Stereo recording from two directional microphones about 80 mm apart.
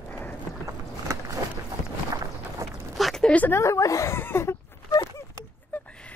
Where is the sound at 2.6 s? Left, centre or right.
Right.